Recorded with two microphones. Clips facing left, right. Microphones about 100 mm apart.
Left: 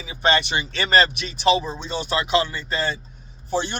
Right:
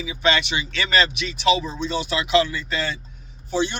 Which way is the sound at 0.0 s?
45° left (ahead or behind).